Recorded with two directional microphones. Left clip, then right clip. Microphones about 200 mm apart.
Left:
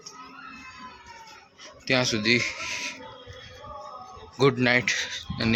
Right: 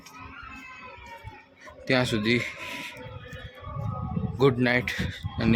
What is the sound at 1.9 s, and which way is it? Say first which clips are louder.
Speech: left 2 dB; 20° right (ahead or behind).